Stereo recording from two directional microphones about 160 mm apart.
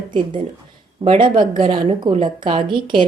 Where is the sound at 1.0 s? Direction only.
30° right (ahead or behind).